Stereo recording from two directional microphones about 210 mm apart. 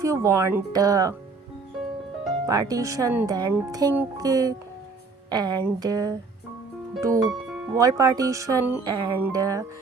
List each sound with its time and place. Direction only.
0.0 s speech: 15° right (ahead or behind)
2.5 s speech: 15° right (ahead or behind)
7.4 s music: centre (ahead or behind)
7.8 s speech: 15° right (ahead or behind)